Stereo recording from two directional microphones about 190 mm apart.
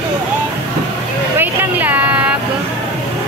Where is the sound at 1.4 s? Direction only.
10° right (ahead or behind).